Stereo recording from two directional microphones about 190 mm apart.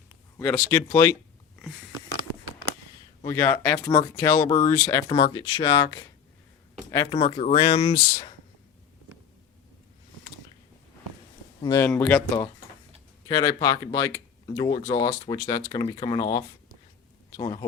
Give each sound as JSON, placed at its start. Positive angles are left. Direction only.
{"t": 0.3, "sound": "speech", "side_deg": 10}
{"t": 3.2, "sound": "speech", "side_deg": 15}
{"t": 7.2, "sound": "speech", "side_deg": 30}
{"t": 11.6, "sound": "speech", "side_deg": 15}
{"t": 11.9, "sound": "speech", "side_deg": 5}
{"t": 13.2, "sound": "speech", "side_deg": 20}